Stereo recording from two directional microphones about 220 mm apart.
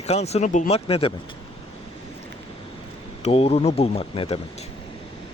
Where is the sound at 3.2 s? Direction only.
25° left (ahead or behind).